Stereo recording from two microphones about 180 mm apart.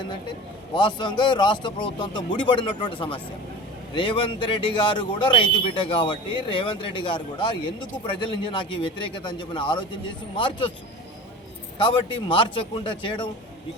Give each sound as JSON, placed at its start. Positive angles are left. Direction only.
{"t": 0.0, "sound": "a man's voice", "side_deg": 25}
{"t": 11.8, "sound": "a man's voice", "side_deg": 25}